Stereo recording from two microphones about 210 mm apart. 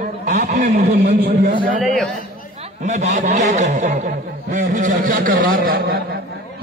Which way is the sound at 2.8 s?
35° right (ahead or behind).